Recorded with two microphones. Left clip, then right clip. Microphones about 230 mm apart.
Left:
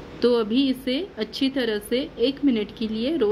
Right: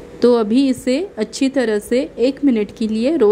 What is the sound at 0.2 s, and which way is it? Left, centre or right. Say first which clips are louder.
A woman's voice: right 7 dB; right.